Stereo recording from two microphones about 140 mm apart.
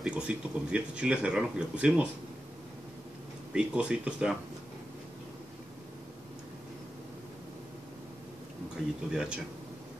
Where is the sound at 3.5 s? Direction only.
5° right (ahead or behind).